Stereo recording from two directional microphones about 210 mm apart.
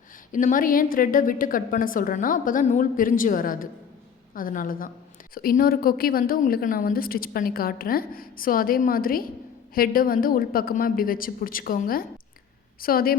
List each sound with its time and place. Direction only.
0.3 s a woman's voice: 40° left (ahead or behind)